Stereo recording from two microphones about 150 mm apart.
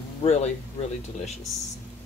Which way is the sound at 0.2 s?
40° left (ahead or behind).